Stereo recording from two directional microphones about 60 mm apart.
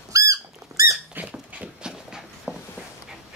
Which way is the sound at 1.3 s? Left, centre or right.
Centre.